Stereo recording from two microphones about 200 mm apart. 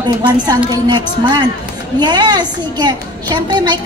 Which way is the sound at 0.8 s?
20° right (ahead or behind).